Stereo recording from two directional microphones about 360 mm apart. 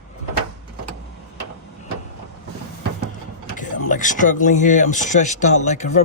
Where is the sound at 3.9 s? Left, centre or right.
Left.